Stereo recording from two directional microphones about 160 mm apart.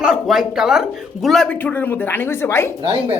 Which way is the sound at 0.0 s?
5° right (ahead or behind).